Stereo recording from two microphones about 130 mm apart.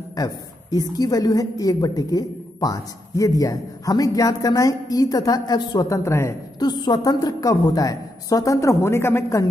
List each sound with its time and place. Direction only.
0.1 s a woman's voice: 30° left (ahead or behind)